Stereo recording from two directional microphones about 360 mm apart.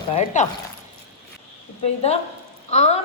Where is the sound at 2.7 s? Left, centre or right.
Centre.